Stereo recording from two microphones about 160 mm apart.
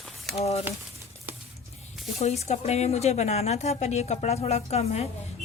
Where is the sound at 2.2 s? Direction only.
45° left (ahead or behind).